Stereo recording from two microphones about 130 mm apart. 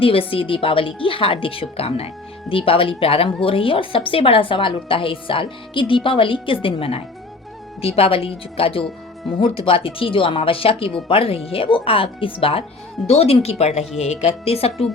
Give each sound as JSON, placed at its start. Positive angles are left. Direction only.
{"t": 0.0, "sound": "a woman's voice", "side_deg": 45}